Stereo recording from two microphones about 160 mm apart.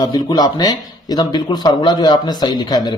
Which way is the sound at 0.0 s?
25° left (ahead or behind).